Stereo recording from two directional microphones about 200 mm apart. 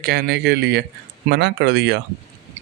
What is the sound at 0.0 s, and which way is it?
Speech, 55° right (ahead or behind).